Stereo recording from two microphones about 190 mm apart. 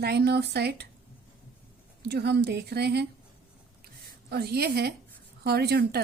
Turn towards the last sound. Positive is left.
turn(degrees=-55)  # may be behind; listen again after turning